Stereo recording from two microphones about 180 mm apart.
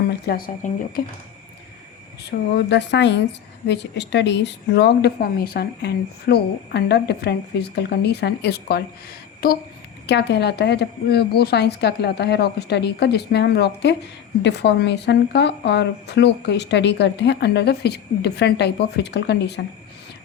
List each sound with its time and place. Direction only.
0.3 s speech: 50° left (ahead or behind)
2.2 s a woman's voice: 75° left (ahead or behind); by 9.6 s 55° left (ahead or behind)
10.1 s a woman's voice: 70° left (ahead or behind)